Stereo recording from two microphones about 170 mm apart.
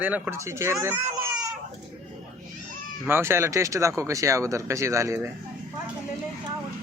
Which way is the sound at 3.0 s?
15° right (ahead or behind).